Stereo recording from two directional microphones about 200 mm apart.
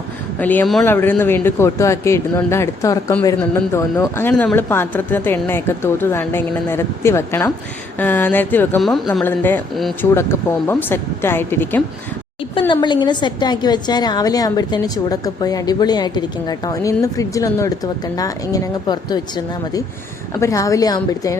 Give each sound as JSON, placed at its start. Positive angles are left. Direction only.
{"t": 0.3, "sound": "speech", "side_deg": 10}
{"t": 10.2, "sound": "speech", "side_deg": 10}
{"t": 12.5, "sound": "a woman's voice", "side_deg": 25}
{"t": 20.3, "sound": "speech", "side_deg": 15}